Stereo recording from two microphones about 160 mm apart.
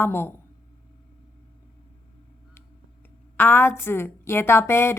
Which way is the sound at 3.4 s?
15° left (ahead or behind).